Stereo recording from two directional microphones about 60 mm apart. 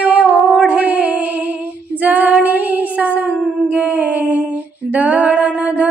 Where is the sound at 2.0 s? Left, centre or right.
Right.